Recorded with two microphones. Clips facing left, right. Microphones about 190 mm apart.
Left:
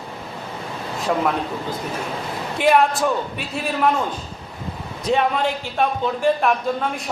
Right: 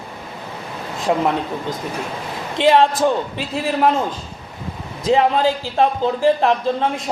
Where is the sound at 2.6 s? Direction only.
25° right (ahead or behind).